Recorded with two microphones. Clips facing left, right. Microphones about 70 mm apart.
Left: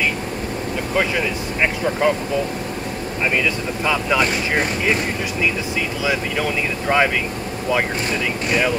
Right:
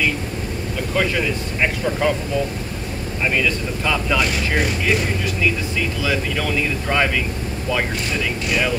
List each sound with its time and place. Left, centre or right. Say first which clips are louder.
0.9 s speech: even; centre
3.3 s speech: even; centre
6.0 s speech: left 2 dB; centre